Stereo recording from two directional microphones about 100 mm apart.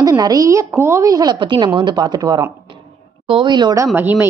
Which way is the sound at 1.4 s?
55° right (ahead or behind).